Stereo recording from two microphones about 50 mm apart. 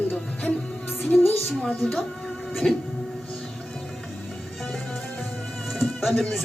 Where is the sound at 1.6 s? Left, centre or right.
Centre.